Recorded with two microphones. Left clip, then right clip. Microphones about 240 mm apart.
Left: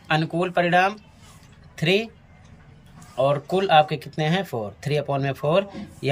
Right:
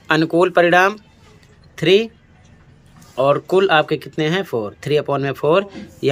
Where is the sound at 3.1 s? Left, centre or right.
Centre.